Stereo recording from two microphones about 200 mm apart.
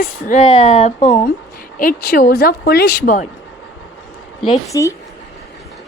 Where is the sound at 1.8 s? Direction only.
50° left (ahead or behind).